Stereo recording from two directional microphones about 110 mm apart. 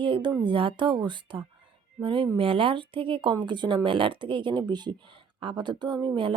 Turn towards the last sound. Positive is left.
turn(degrees=-45)  # may be behind; listen again after turning